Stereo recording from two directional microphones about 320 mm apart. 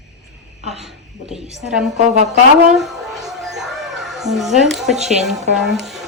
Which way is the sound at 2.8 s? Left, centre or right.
Centre.